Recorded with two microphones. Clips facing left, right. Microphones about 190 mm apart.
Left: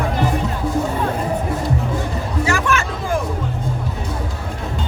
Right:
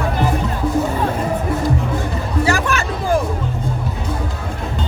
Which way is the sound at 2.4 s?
35° right (ahead or behind).